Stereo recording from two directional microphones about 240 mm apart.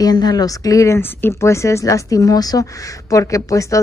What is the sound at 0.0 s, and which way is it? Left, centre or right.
Speech, centre.